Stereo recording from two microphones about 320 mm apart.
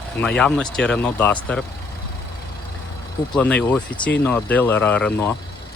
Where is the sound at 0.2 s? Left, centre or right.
Centre.